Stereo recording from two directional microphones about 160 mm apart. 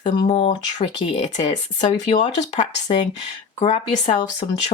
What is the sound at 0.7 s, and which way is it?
Speech, 45° left (ahead or behind).